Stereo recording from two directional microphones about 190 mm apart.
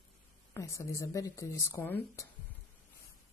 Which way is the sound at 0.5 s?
15° left (ahead or behind).